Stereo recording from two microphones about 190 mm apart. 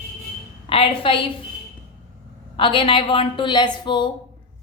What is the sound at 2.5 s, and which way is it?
A woman's voice, 25° left (ahead or behind).